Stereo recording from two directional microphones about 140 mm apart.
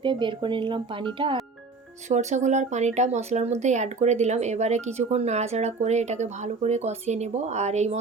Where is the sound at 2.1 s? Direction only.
55° right (ahead or behind).